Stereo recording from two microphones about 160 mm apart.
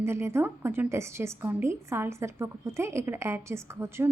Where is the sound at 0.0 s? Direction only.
15° right (ahead or behind).